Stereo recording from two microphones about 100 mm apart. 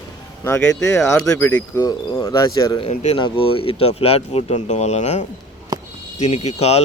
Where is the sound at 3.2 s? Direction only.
55° left (ahead or behind); by 5.1 s 90° left.